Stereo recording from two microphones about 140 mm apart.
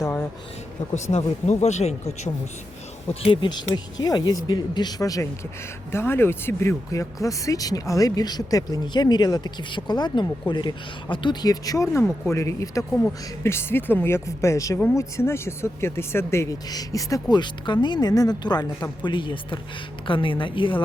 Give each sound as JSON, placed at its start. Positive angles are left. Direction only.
{"t": 1.1, "sound": "speech", "side_deg": 50}
{"t": 3.5, "sound": "a woman's voice", "side_deg": 30}